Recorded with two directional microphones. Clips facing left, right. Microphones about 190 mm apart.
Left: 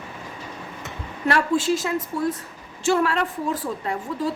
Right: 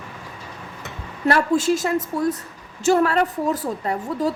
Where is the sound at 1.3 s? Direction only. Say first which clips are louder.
Right 2 dB; 45° right (ahead or behind).